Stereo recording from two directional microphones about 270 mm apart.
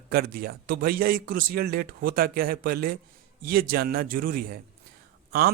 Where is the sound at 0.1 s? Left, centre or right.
Right.